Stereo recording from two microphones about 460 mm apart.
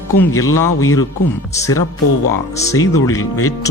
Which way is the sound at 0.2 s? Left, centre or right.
Centre.